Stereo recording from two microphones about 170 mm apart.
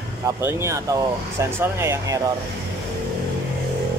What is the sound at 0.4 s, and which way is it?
Speech, 15° right (ahead or behind).